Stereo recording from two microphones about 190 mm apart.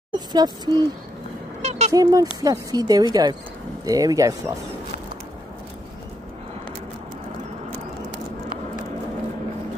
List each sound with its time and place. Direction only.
0.1 s speech: 20° right (ahead or behind)
1.6 s a sound: 35° right (ahead or behind)
1.9 s a woman's voice: 20° right (ahead or behind)